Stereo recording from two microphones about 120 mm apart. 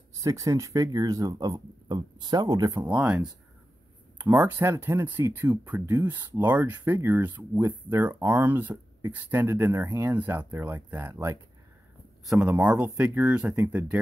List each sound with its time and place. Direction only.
0.2 s speech: 30° right (ahead or behind)
2.8 s speech: 10° right (ahead or behind)